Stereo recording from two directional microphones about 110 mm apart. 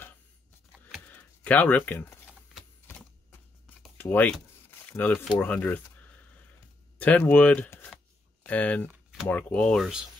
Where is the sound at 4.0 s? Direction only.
20° left (ahead or behind).